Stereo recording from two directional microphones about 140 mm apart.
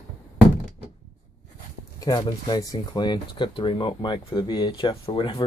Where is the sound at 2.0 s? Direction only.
30° left (ahead or behind).